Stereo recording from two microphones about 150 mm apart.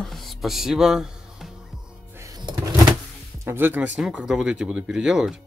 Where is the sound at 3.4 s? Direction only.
15° right (ahead or behind).